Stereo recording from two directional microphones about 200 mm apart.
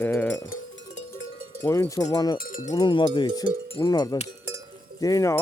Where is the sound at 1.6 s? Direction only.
15° left (ahead or behind).